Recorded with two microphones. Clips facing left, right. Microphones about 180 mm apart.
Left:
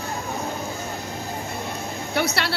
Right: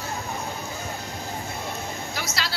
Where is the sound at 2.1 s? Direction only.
65° left (ahead or behind).